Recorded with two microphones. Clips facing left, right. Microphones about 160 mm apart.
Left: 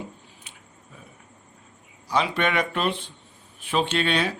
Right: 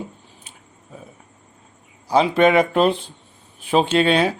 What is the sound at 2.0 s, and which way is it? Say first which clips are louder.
Speech: right 9 dB; 35° right (ahead or behind).